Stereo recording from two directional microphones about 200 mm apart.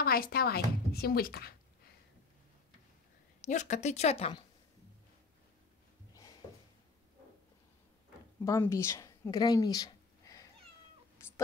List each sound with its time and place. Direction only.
0.0 s speech: 50° left (ahead or behind)
3.3 s a woman's voice: 35° left (ahead or behind)
8.5 s speech: 15° left (ahead or behind)